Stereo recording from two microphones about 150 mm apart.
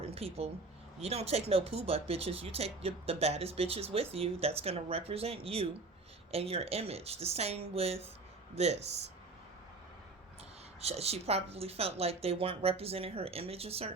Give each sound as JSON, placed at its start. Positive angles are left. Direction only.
{"t": 0.0, "sound": "a woman's voice", "side_deg": -40}
{"t": 10.8, "sound": "speech", "side_deg": -45}